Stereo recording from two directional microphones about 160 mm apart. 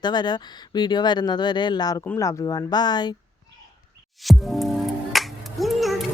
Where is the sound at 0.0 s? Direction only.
25° left (ahead or behind).